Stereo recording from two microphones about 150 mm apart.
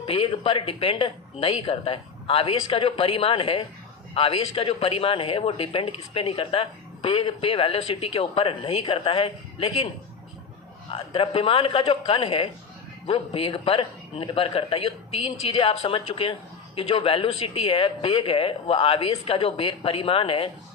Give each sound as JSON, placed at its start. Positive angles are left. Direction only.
{"t": 0.0, "sound": "speech", "side_deg": 35}
{"t": 10.9, "sound": "speech", "side_deg": 35}